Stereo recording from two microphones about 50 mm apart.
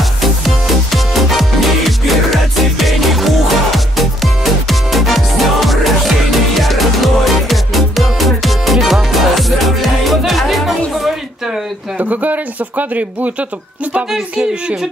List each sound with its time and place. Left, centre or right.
0.2 s music: centre
12.0 s a sound: right
14.3 s speech: right